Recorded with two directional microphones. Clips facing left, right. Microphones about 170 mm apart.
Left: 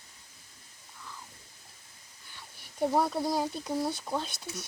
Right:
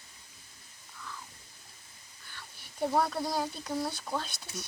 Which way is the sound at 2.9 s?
20° left (ahead or behind).